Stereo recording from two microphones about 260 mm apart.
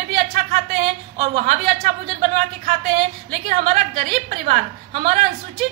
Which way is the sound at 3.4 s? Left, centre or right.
Right.